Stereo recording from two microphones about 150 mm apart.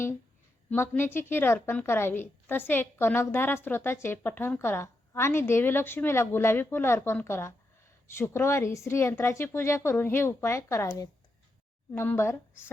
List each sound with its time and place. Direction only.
0.7 s a woman's voice: 15° left (ahead or behind)